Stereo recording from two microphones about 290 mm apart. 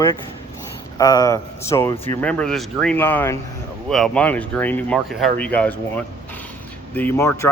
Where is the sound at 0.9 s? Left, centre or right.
Centre.